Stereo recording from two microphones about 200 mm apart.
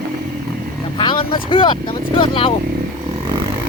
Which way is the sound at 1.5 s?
25° left (ahead or behind).